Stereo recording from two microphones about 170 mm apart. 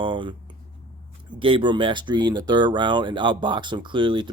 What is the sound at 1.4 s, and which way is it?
Speech, 30° right (ahead or behind).